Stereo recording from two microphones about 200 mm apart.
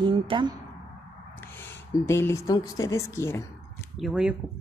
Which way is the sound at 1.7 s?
15° left (ahead or behind).